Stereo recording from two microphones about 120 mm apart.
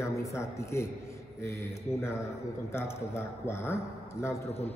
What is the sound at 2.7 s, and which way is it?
Speech, 20° left (ahead or behind).